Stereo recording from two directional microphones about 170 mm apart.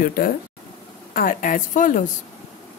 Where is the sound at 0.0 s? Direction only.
55° left (ahead or behind).